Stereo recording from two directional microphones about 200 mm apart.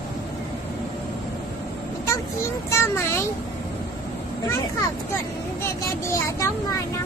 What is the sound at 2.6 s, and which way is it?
Speech, 15° left (ahead or behind).